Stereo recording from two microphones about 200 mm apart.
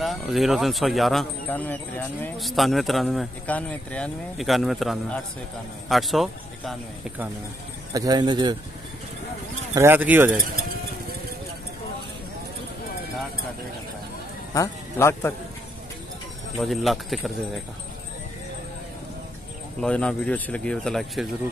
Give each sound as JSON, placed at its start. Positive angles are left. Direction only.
{"t": 0.0, "sound": "speech", "side_deg": 0}
{"t": 7.9, "sound": "speech", "side_deg": -20}
{"t": 9.8, "sound": "speech", "side_deg": -10}
{"t": 14.5, "sound": "speech", "side_deg": 15}
{"t": 16.5, "sound": "speech", "side_deg": 0}
{"t": 19.8, "sound": "speech", "side_deg": 5}